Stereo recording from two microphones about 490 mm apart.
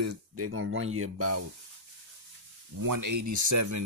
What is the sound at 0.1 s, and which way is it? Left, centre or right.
Speech, right.